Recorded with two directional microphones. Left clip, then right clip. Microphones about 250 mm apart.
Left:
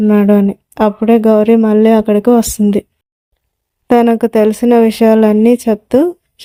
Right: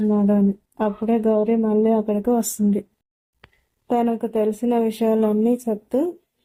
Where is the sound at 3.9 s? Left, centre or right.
Left.